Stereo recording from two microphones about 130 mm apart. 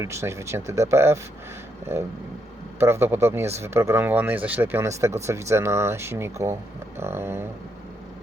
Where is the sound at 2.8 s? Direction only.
20° right (ahead or behind).